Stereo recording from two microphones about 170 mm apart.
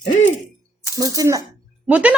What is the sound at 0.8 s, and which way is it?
Speech, 20° right (ahead or behind).